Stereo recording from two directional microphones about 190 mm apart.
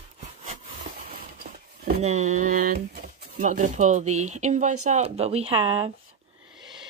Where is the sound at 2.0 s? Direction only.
35° right (ahead or behind).